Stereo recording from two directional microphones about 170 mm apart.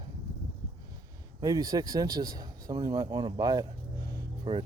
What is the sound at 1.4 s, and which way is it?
Speech, 20° right (ahead or behind).